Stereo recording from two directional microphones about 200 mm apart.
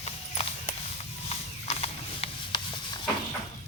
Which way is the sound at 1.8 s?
30° left (ahead or behind).